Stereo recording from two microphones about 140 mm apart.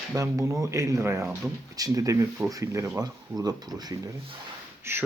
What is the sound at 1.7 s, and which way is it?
Speech, 25° right (ahead or behind).